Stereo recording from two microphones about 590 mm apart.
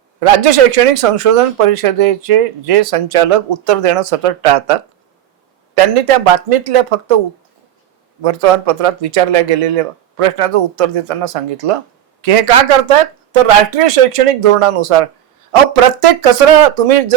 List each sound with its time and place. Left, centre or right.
0.2 s speech: right
8.2 s speech: right